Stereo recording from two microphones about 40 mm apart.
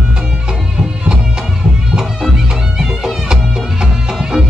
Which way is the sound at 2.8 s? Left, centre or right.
Centre.